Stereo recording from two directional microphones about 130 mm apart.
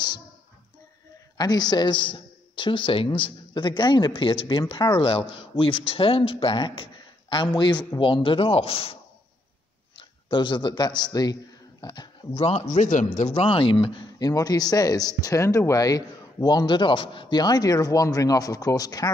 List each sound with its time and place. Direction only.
1.4 s a man's voice: 30° left (ahead or behind); by 8.9 s 50° left (ahead or behind)
9.9 s a man's voice: 35° left (ahead or behind)
12.4 s a man's voice: 55° left (ahead or behind); by 13.3 s 75° left (ahead or behind)
13.3 s speech: 45° left (ahead or behind); by 19.0 s 30° left (ahead or behind)